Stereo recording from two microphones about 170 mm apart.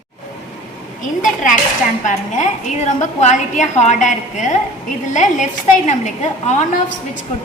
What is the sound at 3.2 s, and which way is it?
A woman's voice, 45° left (ahead or behind).